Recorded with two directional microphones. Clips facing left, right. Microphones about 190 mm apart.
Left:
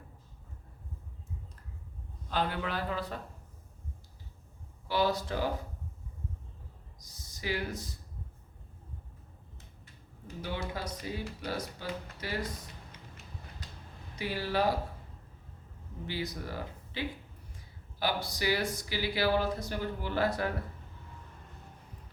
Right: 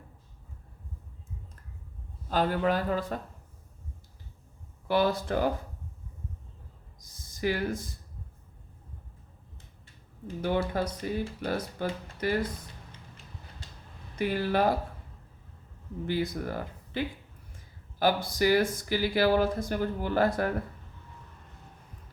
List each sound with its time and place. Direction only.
2.3 s speech: 45° right (ahead or behind)
4.9 s speech: 55° right (ahead or behind)
7.0 s a sound: 50° right (ahead or behind)
10.4 s speech: 50° right (ahead or behind)
13.6 s a sound: 25° right (ahead or behind)
14.2 s speech: 50° right (ahead or behind)
16.0 s speech: 50° right (ahead or behind)
18.0 s speech: 50° right (ahead or behind)